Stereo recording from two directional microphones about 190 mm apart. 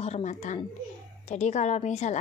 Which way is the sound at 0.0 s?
35° left (ahead or behind).